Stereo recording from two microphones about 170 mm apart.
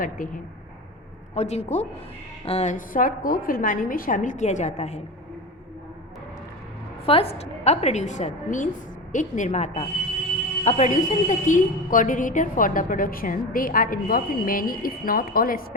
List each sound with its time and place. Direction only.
1.4 s a woman's voice: 40° left (ahead or behind)
7.0 s a woman's voice: 35° left (ahead or behind); by 15.6 s 60° left (ahead or behind)